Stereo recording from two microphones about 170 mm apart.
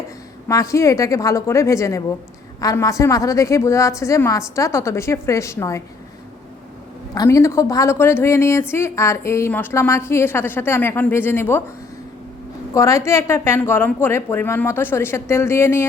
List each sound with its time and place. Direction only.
0.4 s a woman's voice: 20° left (ahead or behind)
7.1 s a woman's voice: 20° left (ahead or behind)
12.7 s a woman's voice: 20° left (ahead or behind)